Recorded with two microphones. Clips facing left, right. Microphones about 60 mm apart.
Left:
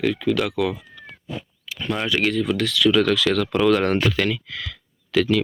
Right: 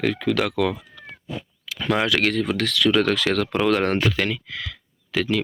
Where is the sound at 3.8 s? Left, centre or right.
Right.